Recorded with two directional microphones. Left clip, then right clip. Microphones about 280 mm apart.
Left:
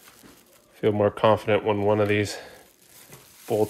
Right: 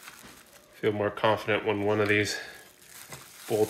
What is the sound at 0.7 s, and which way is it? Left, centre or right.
Speech, left.